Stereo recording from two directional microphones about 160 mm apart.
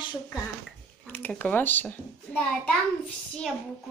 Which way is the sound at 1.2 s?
10° left (ahead or behind).